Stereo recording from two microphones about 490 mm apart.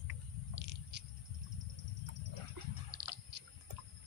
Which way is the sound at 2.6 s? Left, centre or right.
Right.